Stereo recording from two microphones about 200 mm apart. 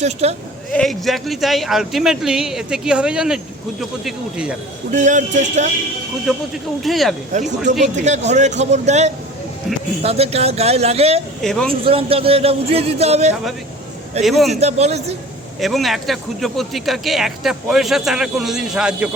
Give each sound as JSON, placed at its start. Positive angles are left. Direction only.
{"t": 0.0, "sound": "a man's voice", "side_deg": -30}
{"t": 0.7, "sound": "speech", "side_deg": 0}
{"t": 4.9, "sound": "a man's voice", "side_deg": -40}
{"t": 6.8, "sound": "speech", "side_deg": 0}
{"t": 7.6, "sound": "a man's voice", "side_deg": -40}
{"t": 11.4, "sound": "speech", "side_deg": 5}
{"t": 11.7, "sound": "a man's voice", "side_deg": -30}
{"t": 14.3, "sound": "speech", "side_deg": 0}
{"t": 14.6, "sound": "a man's voice", "side_deg": -35}
{"t": 15.6, "sound": "speech", "side_deg": 0}